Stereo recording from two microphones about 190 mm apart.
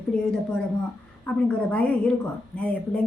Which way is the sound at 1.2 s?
5° left (ahead or behind).